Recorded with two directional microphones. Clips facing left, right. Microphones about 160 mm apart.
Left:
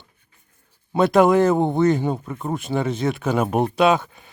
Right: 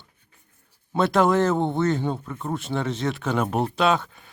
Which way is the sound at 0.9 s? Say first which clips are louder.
Left 4 dB; 10° left (ahead or behind).